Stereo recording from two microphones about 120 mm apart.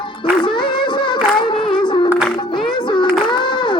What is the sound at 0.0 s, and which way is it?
Music, 40° left (ahead or behind).